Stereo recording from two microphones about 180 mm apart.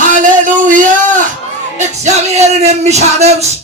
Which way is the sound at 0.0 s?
45° right (ahead or behind).